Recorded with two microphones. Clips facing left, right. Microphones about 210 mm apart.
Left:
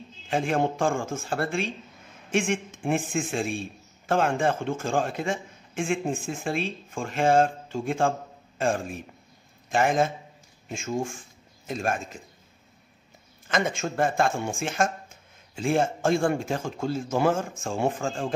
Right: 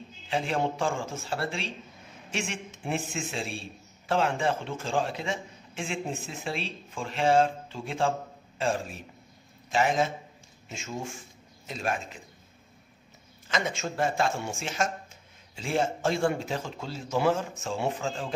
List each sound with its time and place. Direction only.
0.3 s a man's voice: 50° left (ahead or behind)
13.5 s speech: 50° left (ahead or behind)